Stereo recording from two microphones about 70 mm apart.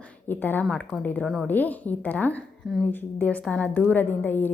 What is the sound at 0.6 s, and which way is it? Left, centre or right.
Speech, centre.